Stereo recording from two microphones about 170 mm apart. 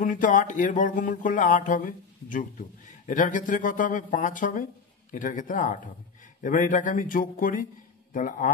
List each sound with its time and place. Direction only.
0.1 s speech: 50° left (ahead or behind)